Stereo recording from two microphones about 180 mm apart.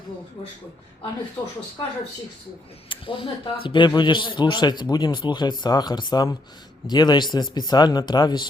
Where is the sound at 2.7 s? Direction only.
30° left (ahead or behind).